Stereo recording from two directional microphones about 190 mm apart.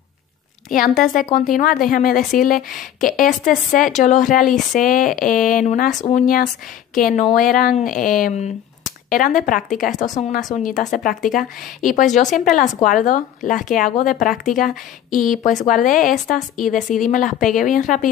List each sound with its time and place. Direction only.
0.7 s a woman's voice: 45° left (ahead or behind)